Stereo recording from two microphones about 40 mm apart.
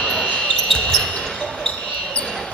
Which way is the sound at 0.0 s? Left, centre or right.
Centre.